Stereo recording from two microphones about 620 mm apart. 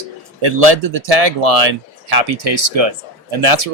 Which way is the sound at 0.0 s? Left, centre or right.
Right.